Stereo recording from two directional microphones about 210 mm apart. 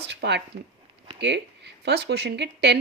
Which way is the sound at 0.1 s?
55° right (ahead or behind).